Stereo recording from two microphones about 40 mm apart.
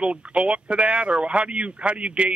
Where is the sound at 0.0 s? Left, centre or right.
Right.